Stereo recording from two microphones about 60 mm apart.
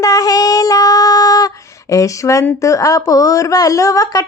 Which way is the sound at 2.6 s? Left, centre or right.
Left.